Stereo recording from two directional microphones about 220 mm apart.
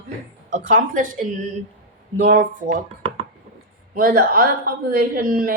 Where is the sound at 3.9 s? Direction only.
45° right (ahead or behind).